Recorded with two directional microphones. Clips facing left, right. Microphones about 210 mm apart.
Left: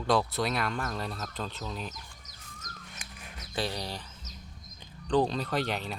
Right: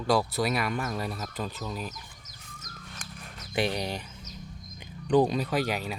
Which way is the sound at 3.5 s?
20° right (ahead or behind).